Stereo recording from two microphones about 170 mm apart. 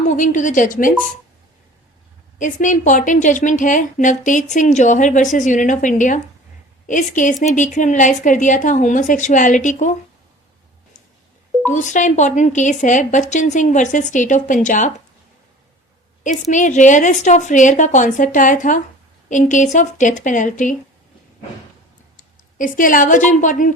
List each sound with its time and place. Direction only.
0.1 s a woman's voice: 50° left (ahead or behind)
2.4 s a woman's voice: 50° left (ahead or behind)
11.7 s a woman's voice: 45° left (ahead or behind)
16.2 s a woman's voice: 45° left (ahead or behind)
22.2 s speech: 50° left (ahead or behind)